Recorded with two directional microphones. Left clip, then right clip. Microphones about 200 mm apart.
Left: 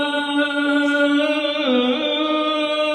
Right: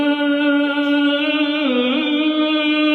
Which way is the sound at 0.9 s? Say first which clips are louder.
Even; 40° right (ahead or behind).